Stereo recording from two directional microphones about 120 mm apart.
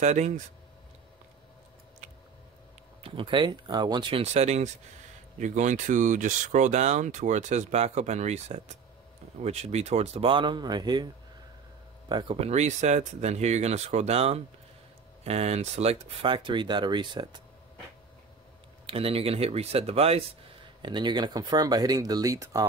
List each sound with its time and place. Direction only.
0.0 s speech: 80° right
3.0 s speech: 45° right (ahead or behind)
4.1 s speech: 65° right (ahead or behind)
5.4 s speech: 90° right; by 8.7 s 75° right (ahead or behind)
9.4 s speech: 65° right (ahead or behind)
10.2 s speech: 40° right (ahead or behind)
12.1 s speech: 40° right (ahead or behind)
12.4 s speech: 65° right (ahead or behind); by 17.4 s 35° right (ahead or behind)
18.9 s speech: 50° right (ahead or behind)
20.8 s speech: 40° right (ahead or behind)